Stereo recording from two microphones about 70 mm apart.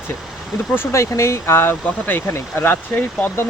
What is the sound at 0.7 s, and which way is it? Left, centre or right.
Speech, left.